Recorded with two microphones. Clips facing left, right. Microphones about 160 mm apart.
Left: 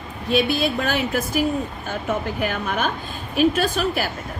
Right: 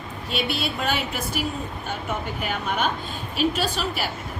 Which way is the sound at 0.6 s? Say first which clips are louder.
Left 4 dB; 45° left (ahead or behind).